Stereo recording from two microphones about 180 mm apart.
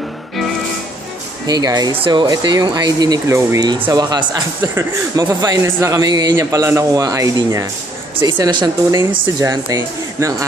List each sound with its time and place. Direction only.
1.5 s a man's voice: 20° right (ahead or behind)